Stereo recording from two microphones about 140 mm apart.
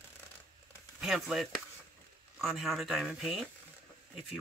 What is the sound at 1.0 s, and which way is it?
Speech, centre (ahead or behind).